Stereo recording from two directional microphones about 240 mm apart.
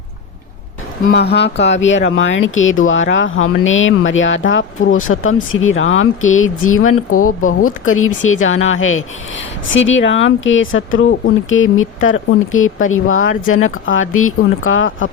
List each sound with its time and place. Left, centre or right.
1.0 s speech: left